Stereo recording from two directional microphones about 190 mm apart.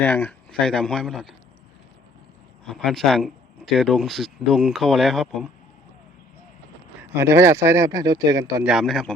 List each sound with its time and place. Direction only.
0.0 s speech: 10° left (ahead or behind)
2.6 s speech: centre (ahead or behind)
7.1 s speech: 15° right (ahead or behind)
8.6 s speech: centre (ahead or behind)